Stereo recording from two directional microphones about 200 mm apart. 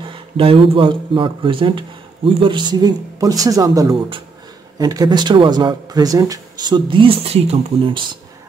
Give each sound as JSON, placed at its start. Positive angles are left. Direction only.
{"t": 0.1, "sound": "speech", "side_deg": -25}